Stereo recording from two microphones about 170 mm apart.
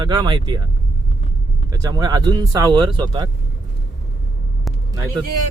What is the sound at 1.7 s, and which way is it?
Speech, 20° right (ahead or behind).